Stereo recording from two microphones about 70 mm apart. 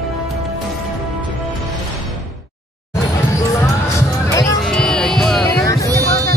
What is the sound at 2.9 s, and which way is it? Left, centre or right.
Music, left.